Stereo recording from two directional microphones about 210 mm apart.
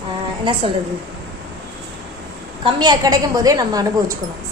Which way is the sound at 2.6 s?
20° right (ahead or behind).